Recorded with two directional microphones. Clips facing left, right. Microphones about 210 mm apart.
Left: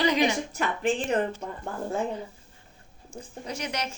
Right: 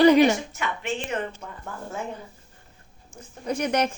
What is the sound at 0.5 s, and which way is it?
Speech, 35° left (ahead or behind).